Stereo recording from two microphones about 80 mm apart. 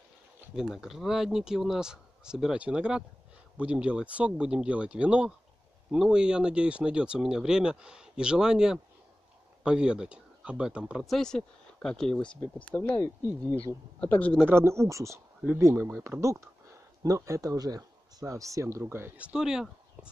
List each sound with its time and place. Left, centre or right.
0.6 s speech: centre
11.1 s speech: centre
13.0 s speech: left
13.6 s a man's voice: centre
14.5 s speech: right
19.1 s speech: centre